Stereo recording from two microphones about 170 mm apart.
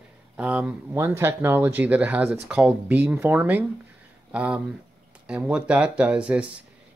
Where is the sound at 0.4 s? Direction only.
10° right (ahead or behind).